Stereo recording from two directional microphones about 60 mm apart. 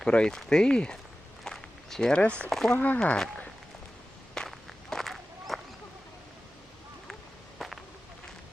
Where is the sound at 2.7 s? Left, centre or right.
Left.